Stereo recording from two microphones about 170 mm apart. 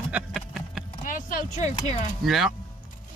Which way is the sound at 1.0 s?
50° left (ahead or behind).